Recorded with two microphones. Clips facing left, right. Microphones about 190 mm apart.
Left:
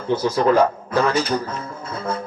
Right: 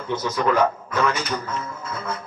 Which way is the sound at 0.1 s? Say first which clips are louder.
Left 5 dB; 30° left (ahead or behind).